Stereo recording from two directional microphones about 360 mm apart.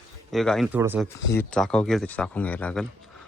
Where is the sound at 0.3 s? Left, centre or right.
Centre.